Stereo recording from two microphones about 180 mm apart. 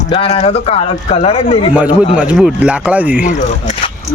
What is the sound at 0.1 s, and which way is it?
Speech, 35° left (ahead or behind).